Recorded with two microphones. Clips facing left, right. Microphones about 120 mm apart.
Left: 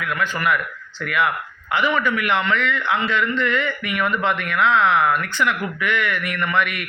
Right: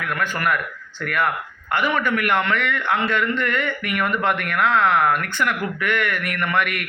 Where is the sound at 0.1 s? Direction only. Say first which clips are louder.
Left 1 dB; 50° right (ahead or behind).